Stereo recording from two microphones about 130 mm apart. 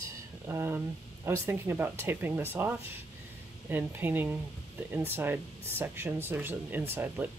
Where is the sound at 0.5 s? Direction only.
20° right (ahead or behind).